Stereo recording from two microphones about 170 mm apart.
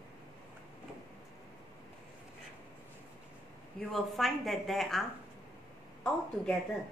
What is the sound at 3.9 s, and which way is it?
A woman's voice, centre (ahead or behind).